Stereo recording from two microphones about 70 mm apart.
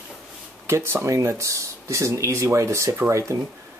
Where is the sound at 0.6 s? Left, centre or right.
Right.